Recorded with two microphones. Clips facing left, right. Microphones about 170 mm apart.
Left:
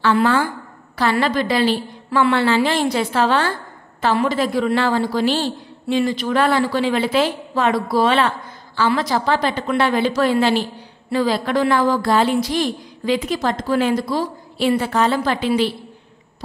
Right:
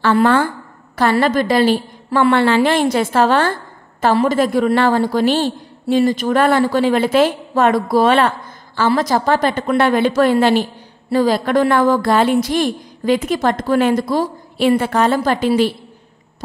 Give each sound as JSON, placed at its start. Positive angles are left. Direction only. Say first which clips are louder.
{"t": 0.0, "sound": "a woman's voice", "louder": "right 3 dB", "side_deg": -50}